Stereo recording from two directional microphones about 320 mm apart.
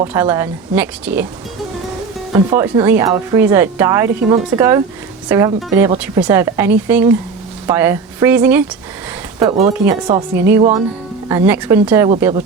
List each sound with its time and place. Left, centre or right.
0.0 s speech: centre
2.3 s speech: centre
9.4 s speech: centre